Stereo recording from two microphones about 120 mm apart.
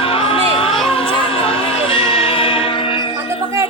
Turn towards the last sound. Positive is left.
turn(degrees=45)  # may be behind; listen again after turning